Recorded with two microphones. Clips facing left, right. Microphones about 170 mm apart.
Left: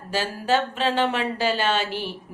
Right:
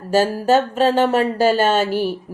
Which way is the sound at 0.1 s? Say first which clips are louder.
Right 8 dB; 45° right (ahead or behind).